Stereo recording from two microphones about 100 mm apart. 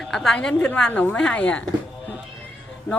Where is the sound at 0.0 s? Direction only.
Centre (ahead or behind).